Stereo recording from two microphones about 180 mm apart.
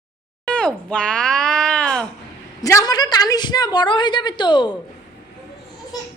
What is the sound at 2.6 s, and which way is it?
A woman's voice, 20° left (ahead or behind).